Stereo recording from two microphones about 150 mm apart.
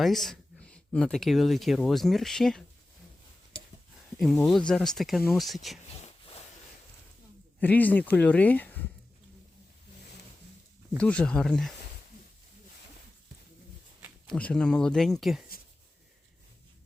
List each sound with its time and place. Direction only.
0.0 s speech: centre (ahead or behind)
4.2 s speech: centre (ahead or behind)
6.1 s a sound: 40° left (ahead or behind)
7.6 s speech: 10° left (ahead or behind)
10.9 s speech: 5° left (ahead or behind)
14.3 s speech: 5° left (ahead or behind)